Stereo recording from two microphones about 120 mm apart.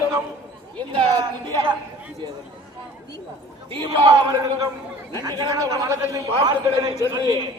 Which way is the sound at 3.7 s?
45° right (ahead or behind).